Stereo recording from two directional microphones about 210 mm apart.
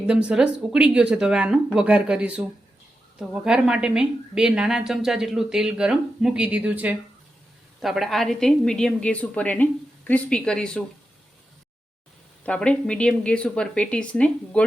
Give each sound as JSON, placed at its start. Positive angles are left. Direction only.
{"t": 0.1, "sound": "a woman's voice", "side_deg": -5}
{"t": 12.5, "sound": "a woman's voice", "side_deg": 5}